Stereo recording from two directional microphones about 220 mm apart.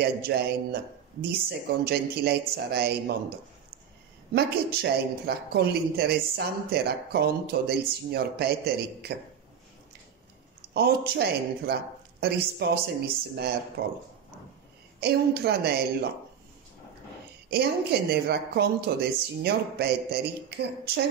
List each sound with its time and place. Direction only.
0.0 s speech: 45° right (ahead or behind)
1.9 s speech: 45° right (ahead or behind)
4.3 s speech: 45° right (ahead or behind)
10.7 s speech: 45° right (ahead or behind)
15.0 s speech: 45° right (ahead or behind)
17.5 s speech: 45° right (ahead or behind)